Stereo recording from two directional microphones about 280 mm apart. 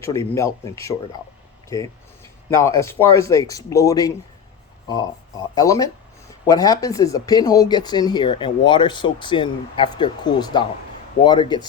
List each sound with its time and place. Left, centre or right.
0.0 s speech: centre
5.5 s speech: centre